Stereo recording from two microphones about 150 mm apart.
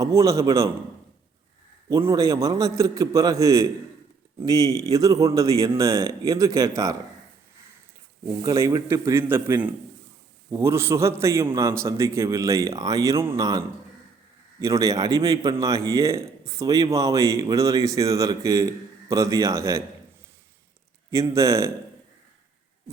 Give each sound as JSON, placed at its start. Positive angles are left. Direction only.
{"t": 0.0, "sound": "a man's voice", "side_deg": -20}
{"t": 1.9, "sound": "a man's voice", "side_deg": -20}
{"t": 8.4, "sound": "a man's voice", "side_deg": -20}
{"t": 21.1, "sound": "a man's voice", "side_deg": -20}